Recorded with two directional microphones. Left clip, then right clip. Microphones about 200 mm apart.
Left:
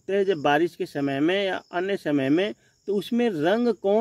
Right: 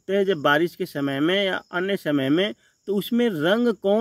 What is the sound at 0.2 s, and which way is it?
Speech, 35° right (ahead or behind).